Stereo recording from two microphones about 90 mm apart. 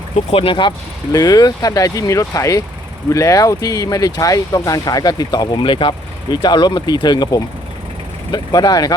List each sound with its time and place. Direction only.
0.3 s speech: 85° left
1.1 s speech: 40° left (ahead or behind); by 5.9 s 65° left (ahead or behind)
6.3 s speech: 55° left (ahead or behind)